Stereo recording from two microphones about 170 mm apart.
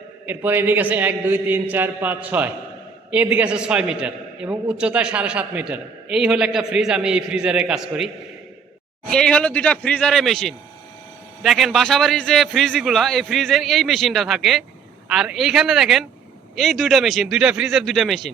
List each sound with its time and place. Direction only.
0.3 s a man's voice: 10° right (ahead or behind)